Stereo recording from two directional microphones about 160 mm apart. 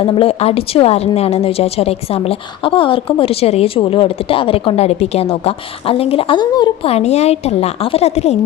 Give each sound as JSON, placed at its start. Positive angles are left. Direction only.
{"t": 0.0, "sound": "a woman's voice", "side_deg": 35}
{"t": 6.9, "sound": "a woman's voice", "side_deg": 40}